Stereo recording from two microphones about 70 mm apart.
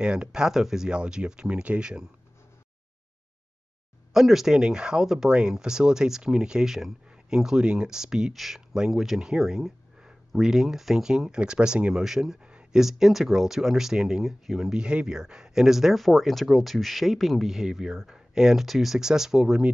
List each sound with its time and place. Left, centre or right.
0.0 s speech: centre
4.1 s speech: centre
12.4 s a sound: centre
12.8 s speech: centre